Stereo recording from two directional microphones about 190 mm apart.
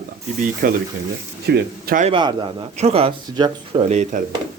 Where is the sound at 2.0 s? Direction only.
25° right (ahead or behind); by 4.2 s 40° right (ahead or behind).